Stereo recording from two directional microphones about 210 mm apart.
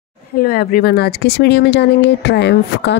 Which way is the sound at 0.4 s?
45° left (ahead or behind).